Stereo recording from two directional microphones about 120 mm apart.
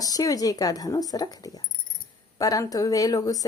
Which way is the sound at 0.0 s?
30° left (ahead or behind).